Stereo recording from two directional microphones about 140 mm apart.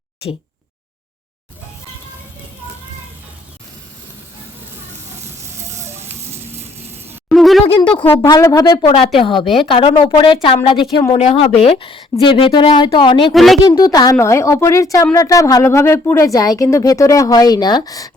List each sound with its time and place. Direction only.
5.7 s music: 20° right (ahead or behind)
6.3 s a sound: 20° right (ahead or behind)
7.3 s a sound: centre (ahead or behind)
7.8 s a sound: 35° left (ahead or behind)
8.2 s a woman's voice: 20° left (ahead or behind)
8.9 s a woman's voice: 40° left (ahead or behind)
11.2 s a woman's voice: 45° left (ahead or behind)
13.3 s a woman's voice: centre (ahead or behind)
13.6 s a woman's voice: 25° left (ahead or behind)